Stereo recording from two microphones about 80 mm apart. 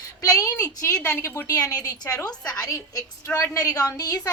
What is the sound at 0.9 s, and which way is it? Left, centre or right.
Speech, left.